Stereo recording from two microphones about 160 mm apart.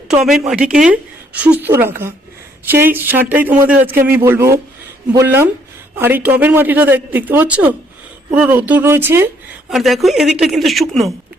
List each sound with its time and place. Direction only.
0.1 s speech: 5° right (ahead or behind)
9.6 s a woman's voice: centre (ahead or behind)